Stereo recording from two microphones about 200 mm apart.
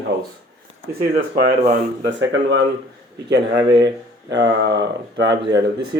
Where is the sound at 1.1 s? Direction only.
50° right (ahead or behind).